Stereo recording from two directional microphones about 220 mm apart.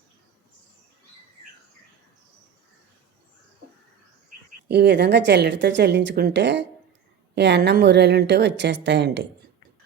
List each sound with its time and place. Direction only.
4.7 s a woman's voice: 50° right (ahead or behind)